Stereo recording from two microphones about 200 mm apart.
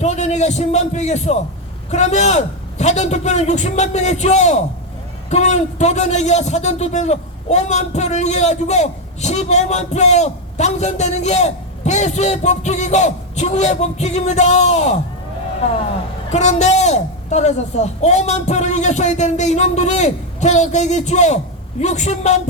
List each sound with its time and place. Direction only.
0.0 s a man's voice: 35° left (ahead or behind)
16.3 s a man's voice: 35° left (ahead or behind)